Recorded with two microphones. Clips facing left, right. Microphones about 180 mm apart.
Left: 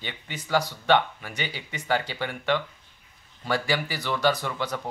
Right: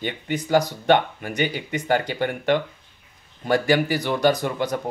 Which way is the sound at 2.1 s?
50° right (ahead or behind).